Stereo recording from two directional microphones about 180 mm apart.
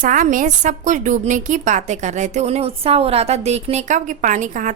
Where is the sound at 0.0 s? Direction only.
45° right (ahead or behind).